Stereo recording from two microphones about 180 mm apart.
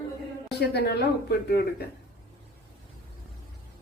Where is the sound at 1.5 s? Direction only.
60° left (ahead or behind).